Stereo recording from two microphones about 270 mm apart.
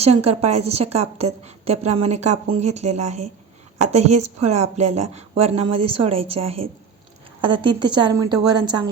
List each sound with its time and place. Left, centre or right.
0.0 s a woman's voice: right